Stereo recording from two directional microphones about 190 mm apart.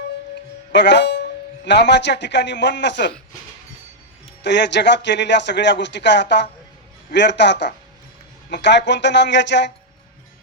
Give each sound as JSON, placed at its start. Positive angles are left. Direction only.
{"t": 0.7, "sound": "speech", "side_deg": 65}
{"t": 4.4, "sound": "a man's voice", "side_deg": 65}